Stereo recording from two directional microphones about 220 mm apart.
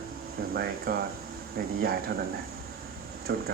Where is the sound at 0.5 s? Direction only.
45° right (ahead or behind).